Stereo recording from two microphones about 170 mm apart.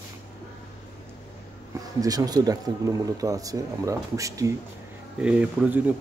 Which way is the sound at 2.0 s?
20° right (ahead or behind).